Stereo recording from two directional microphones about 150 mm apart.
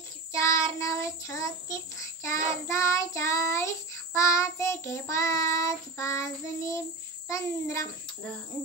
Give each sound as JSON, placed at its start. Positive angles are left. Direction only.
{"t": 0.3, "sound": "child singing", "side_deg": 20}